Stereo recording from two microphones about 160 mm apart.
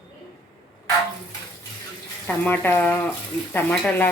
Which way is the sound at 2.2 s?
10° left (ahead or behind).